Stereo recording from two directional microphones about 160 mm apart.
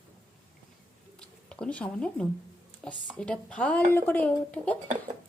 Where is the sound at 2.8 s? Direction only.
5° left (ahead or behind).